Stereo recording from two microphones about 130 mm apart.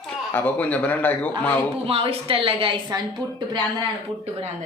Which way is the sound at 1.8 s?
45° right (ahead or behind).